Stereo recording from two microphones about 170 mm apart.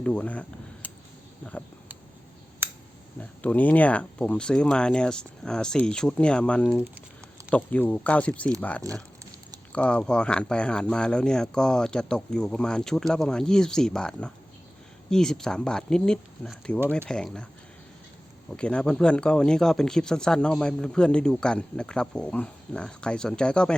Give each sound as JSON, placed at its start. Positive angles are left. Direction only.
{"t": 0.0, "sound": "speech", "side_deg": 5}
{"t": 3.2, "sound": "speech", "side_deg": 10}
{"t": 8.9, "sound": "speech", "side_deg": -20}
{"t": 9.7, "sound": "speech", "side_deg": 5}
{"t": 18.5, "sound": "speech", "side_deg": 5}